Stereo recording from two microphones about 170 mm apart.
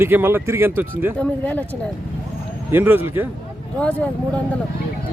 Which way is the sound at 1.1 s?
10° left (ahead or behind).